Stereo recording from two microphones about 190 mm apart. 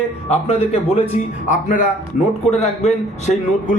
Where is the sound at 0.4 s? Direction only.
35° left (ahead or behind).